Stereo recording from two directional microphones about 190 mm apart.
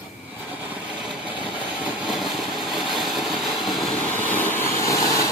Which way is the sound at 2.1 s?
Centre (ahead or behind).